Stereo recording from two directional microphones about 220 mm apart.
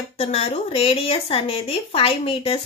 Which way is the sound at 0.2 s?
30° left (ahead or behind).